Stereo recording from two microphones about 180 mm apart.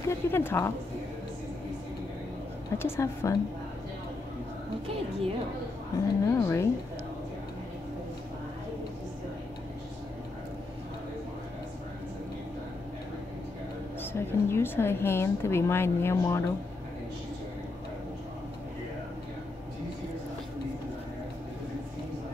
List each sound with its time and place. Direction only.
0.1 s a woman's voice: 10° left (ahead or behind)
2.8 s a woman's voice: 15° left (ahead or behind)
5.9 s a woman's voice: 15° left (ahead or behind)
14.1 s a woman's voice: 15° left (ahead or behind)